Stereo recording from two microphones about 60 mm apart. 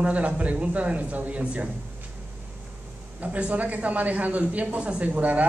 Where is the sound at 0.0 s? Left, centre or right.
Right.